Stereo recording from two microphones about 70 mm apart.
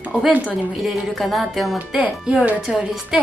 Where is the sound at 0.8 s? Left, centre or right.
Centre.